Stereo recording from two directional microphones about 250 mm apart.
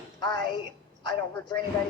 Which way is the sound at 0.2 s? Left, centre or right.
Centre.